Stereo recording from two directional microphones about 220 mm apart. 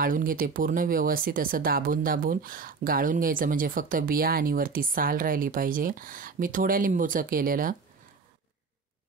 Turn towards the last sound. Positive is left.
turn(degrees=-40)  # may be behind; listen again after turning